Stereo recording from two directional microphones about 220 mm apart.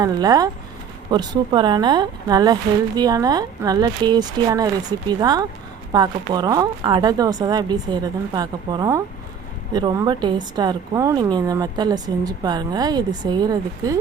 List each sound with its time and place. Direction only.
0.0 s a woman's voice: 15° right (ahead or behind)